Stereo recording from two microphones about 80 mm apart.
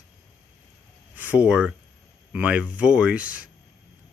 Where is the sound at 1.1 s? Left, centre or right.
Centre.